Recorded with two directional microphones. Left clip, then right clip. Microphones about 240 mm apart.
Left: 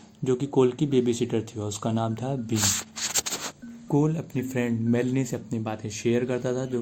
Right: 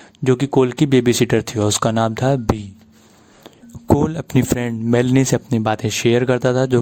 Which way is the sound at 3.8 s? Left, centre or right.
Right.